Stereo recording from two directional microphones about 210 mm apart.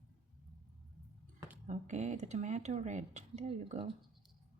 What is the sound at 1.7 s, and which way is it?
Speech, 35° right (ahead or behind).